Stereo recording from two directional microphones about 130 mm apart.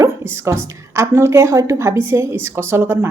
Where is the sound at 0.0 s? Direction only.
20° right (ahead or behind).